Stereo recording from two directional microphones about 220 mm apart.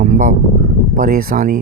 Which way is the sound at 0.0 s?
35° right (ahead or behind).